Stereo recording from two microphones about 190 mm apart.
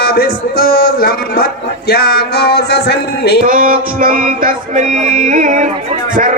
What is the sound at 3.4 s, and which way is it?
Music, 50° right (ahead or behind).